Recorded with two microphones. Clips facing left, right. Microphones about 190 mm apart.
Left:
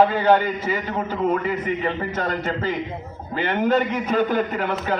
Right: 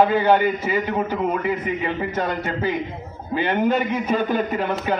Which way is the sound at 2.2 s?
10° right (ahead or behind).